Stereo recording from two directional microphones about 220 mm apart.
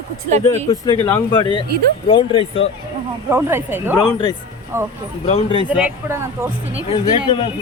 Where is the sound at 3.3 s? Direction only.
10° right (ahead or behind).